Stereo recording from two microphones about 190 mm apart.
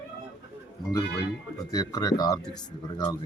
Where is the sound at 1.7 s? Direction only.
20° left (ahead or behind).